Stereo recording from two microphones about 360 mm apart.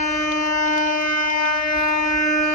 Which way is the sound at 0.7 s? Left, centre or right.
Left.